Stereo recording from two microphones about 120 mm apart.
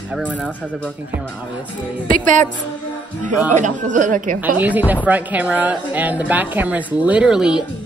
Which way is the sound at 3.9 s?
90° right.